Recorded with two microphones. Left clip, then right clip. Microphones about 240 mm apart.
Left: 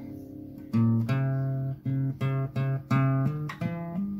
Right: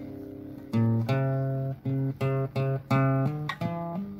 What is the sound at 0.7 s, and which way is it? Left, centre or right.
Music, right.